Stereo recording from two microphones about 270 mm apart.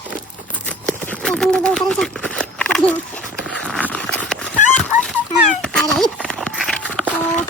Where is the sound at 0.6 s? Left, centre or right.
Centre.